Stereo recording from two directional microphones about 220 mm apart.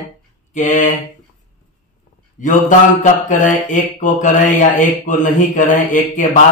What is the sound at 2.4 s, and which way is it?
Mantra, 35° left (ahead or behind).